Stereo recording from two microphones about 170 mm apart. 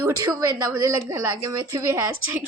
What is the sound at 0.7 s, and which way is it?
Speech, 15° right (ahead or behind).